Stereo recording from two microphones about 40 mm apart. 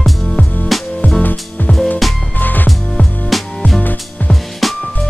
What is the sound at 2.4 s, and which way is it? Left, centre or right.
Music, left.